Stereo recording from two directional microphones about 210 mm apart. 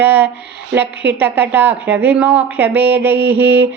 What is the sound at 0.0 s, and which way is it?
Speech, 10° right (ahead or behind).